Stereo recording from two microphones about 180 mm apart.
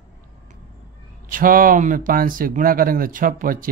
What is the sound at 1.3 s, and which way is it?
Speech, 50° right (ahead or behind).